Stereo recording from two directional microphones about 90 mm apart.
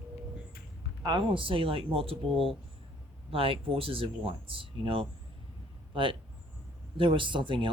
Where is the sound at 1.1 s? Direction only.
65° right (ahead or behind); by 2.2 s 90° right.